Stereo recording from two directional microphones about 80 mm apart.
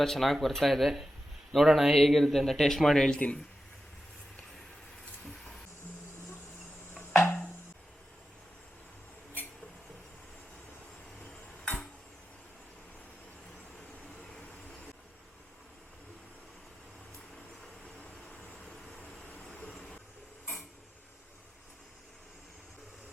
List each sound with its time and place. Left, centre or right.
0.0 s speech: centre
5.2 s hiss: centre
6.9 s a sound: centre
11.2 s tick-tock: centre
14.3 s train: centre
17.8 s vehicle: centre